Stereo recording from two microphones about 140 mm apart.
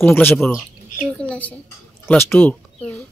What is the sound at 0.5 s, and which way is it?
A woman's voice, 5° left (ahead or behind).